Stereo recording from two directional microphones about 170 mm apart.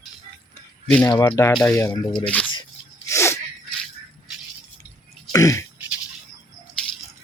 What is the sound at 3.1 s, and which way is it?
Sneeze, 15° left (ahead or behind).